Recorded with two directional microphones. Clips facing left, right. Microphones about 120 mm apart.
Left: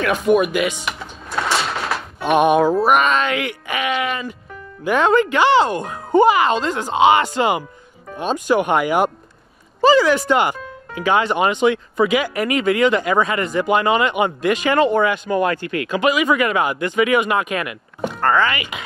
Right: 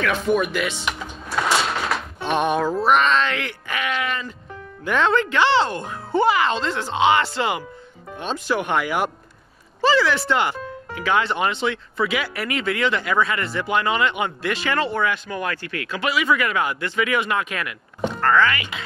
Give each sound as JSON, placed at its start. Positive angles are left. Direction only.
{"t": 0.0, "sound": "drawer open or close", "side_deg": 10}
{"t": 2.8, "sound": "speech", "side_deg": 10}